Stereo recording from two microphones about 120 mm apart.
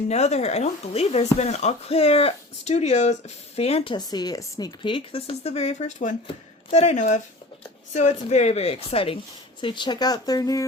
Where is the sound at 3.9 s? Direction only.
35° left (ahead or behind); by 8.2 s 80° left.